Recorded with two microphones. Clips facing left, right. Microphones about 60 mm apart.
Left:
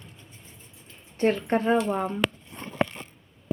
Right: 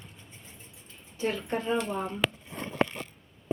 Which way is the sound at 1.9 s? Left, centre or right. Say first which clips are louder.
Left 5 dB; left.